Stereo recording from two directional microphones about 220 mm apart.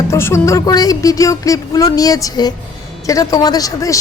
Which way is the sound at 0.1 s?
10° left (ahead or behind).